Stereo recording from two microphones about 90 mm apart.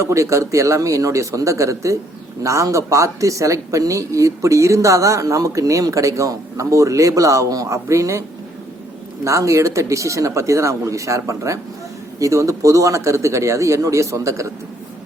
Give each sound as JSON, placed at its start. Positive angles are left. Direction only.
{"t": 0.0, "sound": "speech", "side_deg": -35}
{"t": 9.2, "sound": "speech", "side_deg": -35}